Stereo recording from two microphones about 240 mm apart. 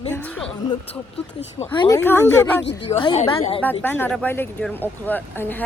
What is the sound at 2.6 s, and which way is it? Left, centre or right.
Speech, left.